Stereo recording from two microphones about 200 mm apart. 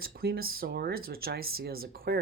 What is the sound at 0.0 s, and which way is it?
Speech, 50° right (ahead or behind).